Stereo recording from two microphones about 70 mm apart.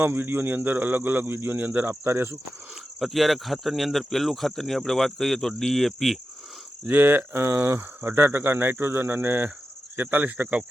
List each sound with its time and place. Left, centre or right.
0.0 s speech: right
3.0 s speech: centre
6.9 s speech: right